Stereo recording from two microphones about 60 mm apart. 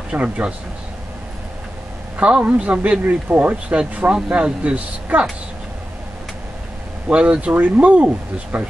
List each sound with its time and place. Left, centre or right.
0.1 s speech: centre
2.1 s speech: right
7.1 s speech: right